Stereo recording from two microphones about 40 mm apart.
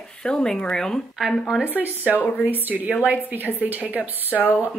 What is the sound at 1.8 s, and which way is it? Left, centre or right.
A woman's voice, right.